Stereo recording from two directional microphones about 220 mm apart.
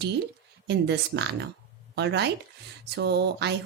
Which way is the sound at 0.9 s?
50° right (ahead or behind).